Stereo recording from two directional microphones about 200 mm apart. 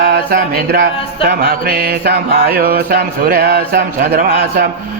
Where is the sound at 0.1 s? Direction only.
50° right (ahead or behind).